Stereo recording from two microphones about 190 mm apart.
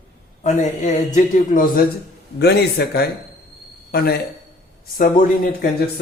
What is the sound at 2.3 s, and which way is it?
A man's voice, 60° left (ahead or behind).